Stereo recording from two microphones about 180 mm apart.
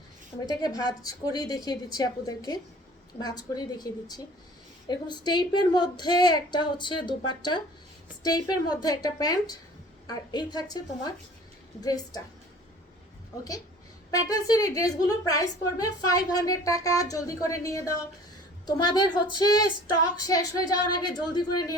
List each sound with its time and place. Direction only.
0.3 s a woman's voice: 20° left (ahead or behind)
14.1 s a woman's voice: 20° left (ahead or behind)